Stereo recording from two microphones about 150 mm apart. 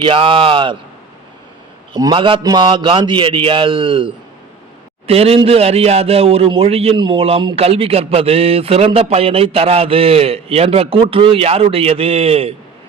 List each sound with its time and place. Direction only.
0.0 s a man's voice: 35° right (ahead or behind)
1.9 s a man's voice: 30° right (ahead or behind)